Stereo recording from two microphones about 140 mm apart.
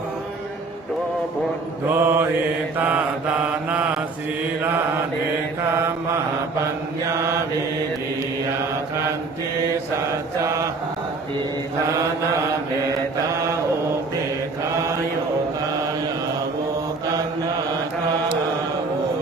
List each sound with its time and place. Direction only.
1.9 s mantra: 15° right (ahead or behind)
7.2 s mantra: 20° right (ahead or behind)